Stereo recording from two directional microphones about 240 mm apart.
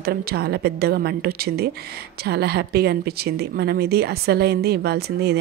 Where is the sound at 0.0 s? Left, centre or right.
Right.